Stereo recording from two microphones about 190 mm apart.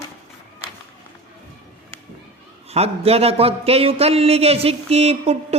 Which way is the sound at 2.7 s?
30° right (ahead or behind).